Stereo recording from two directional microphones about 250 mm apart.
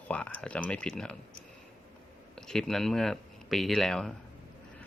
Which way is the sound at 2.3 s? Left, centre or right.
Centre.